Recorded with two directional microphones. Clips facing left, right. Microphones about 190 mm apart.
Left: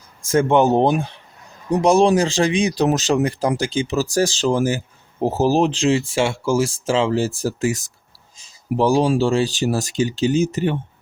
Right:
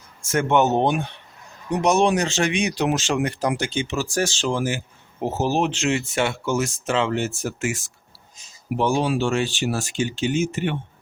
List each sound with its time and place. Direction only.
0.3 s speech: 30° left (ahead or behind)